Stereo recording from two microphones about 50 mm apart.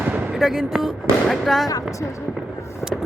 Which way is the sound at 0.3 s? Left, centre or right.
Centre.